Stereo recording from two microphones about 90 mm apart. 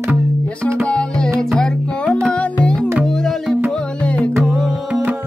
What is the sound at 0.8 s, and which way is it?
Music, 10° left (ahead or behind).